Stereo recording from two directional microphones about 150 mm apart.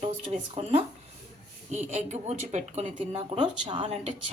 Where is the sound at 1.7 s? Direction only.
50° right (ahead or behind).